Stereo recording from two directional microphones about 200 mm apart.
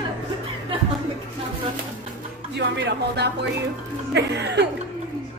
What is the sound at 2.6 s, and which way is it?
Speech, 60° right (ahead or behind).